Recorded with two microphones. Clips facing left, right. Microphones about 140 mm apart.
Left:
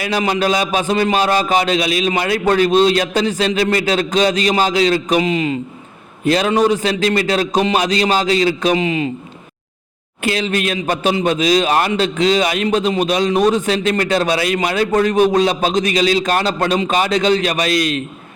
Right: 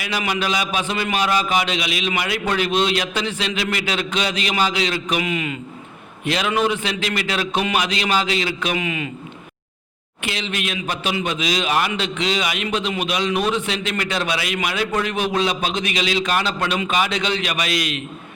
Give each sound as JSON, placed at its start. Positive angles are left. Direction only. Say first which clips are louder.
{"t": 0.0, "sound": "a man's voice", "louder": "left 6 dB", "side_deg": 40}
{"t": 10.2, "sound": "a man's voice", "louder": "left 8 dB", "side_deg": 45}